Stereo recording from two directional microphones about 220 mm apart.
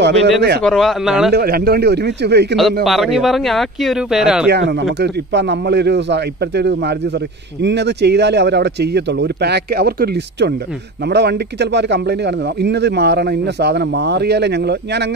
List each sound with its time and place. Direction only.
0.0 s speech: 50° right (ahead or behind)
0.7 s speech: centre (ahead or behind)
1.3 s speech: 45° right (ahead or behind)
2.5 s speech: centre (ahead or behind)
4.5 s speech: 50° right (ahead or behind)